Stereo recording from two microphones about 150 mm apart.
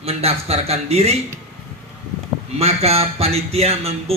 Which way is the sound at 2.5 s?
45° right (ahead or behind).